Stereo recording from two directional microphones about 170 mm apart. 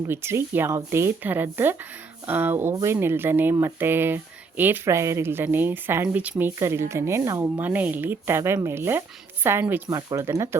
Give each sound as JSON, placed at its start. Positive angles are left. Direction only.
{"t": 0.1, "sound": "speech", "side_deg": -15}